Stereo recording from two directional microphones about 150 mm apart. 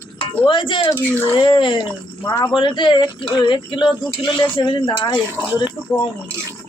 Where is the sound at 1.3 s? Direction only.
30° left (ahead or behind).